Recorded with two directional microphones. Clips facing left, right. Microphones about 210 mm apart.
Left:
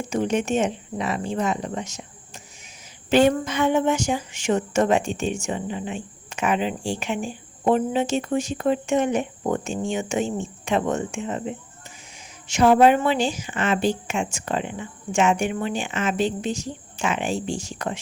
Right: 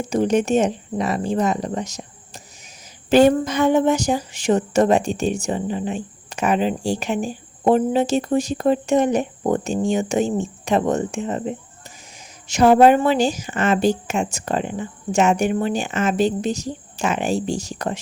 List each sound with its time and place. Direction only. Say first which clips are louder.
0.1 s speech: right 5 dB; 40° right (ahead or behind)